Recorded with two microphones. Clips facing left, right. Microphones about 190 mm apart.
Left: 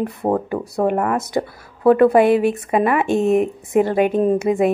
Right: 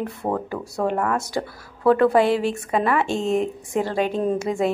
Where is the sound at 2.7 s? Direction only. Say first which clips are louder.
Left 2 dB; 15° left (ahead or behind).